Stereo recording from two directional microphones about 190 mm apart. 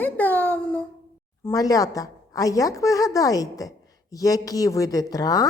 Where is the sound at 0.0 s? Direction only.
10° left (ahead or behind).